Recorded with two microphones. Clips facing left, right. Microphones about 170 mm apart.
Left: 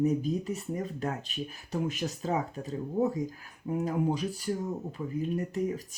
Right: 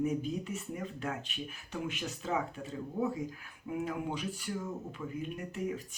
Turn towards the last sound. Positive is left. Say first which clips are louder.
# left 6 dB
turn(degrees=35)  # may be behind; listen again after turning